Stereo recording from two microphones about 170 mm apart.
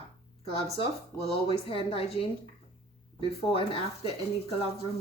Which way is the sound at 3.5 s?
35° left (ahead or behind).